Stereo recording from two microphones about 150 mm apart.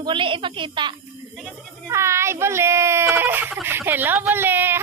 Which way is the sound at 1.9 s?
20° right (ahead or behind).